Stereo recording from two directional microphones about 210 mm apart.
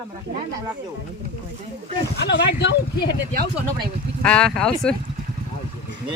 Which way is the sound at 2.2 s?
55° left (ahead or behind).